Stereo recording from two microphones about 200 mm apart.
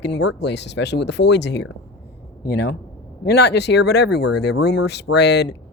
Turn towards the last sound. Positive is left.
turn(degrees=60)  # may be behind; listen again after turning